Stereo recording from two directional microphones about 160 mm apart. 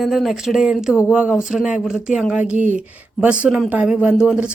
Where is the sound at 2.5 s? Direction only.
50° right (ahead or behind).